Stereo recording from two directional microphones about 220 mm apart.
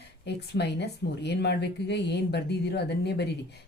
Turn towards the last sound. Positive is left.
turn(degrees=50)  # may be behind; listen again after turning